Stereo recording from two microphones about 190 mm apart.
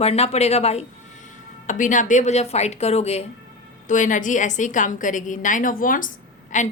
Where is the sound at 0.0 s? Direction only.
35° left (ahead or behind).